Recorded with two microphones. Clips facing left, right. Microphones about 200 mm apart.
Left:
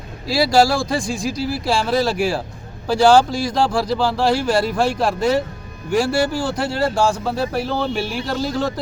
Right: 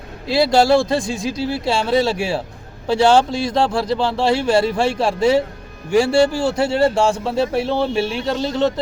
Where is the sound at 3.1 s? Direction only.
25° right (ahead or behind).